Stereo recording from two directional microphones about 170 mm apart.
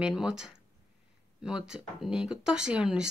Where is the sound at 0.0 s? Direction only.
5° right (ahead or behind).